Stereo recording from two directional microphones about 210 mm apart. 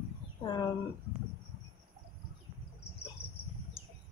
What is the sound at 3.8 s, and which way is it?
Bird, 25° left (ahead or behind).